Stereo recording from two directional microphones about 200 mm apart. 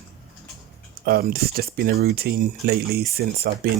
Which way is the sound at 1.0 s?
50° right (ahead or behind).